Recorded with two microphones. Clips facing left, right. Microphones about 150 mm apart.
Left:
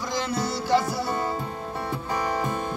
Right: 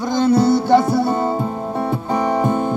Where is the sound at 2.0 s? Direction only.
25° right (ahead or behind).